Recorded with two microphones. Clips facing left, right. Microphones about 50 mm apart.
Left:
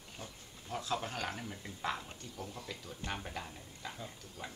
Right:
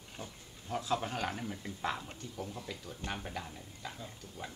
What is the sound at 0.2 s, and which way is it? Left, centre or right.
Speech, centre.